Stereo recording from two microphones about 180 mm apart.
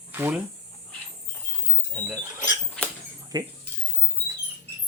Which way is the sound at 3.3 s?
20° right (ahead or behind).